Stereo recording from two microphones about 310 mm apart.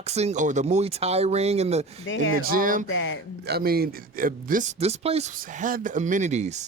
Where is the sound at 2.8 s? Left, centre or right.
Left.